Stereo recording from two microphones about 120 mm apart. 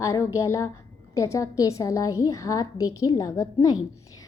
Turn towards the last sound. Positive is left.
turn(degrees=30)  # may be behind; listen again after turning